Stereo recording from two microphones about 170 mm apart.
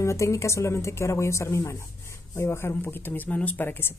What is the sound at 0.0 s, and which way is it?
A woman's voice, 15° left (ahead or behind).